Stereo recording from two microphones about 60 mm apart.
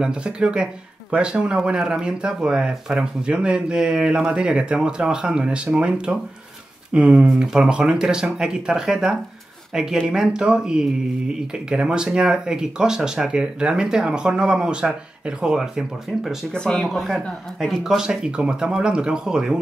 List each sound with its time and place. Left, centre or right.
0.0 s speech: centre
16.5 s speech: centre
16.8 s speech: centre